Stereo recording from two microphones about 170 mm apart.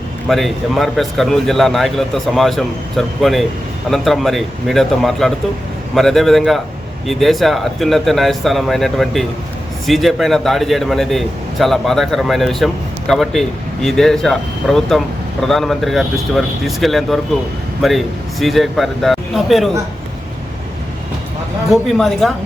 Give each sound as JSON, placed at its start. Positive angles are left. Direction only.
{"t": 0.3, "sound": "a man's voice", "side_deg": 0}
{"t": 21.7, "sound": "a man's voice", "side_deg": 0}